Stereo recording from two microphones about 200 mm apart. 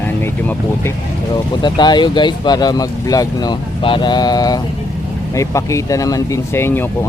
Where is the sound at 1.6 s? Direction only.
20° left (ahead or behind).